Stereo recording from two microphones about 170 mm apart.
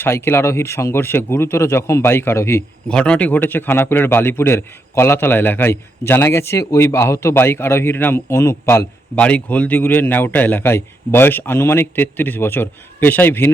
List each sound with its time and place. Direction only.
0.0 s a man's voice: 15° left (ahead or behind)